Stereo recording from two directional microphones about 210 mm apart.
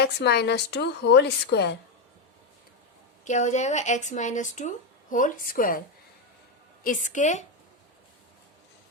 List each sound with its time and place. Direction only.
0.0 s a woman's voice: 50° left (ahead or behind)
3.2 s speech: 35° left (ahead or behind)
6.8 s speech: 35° left (ahead or behind)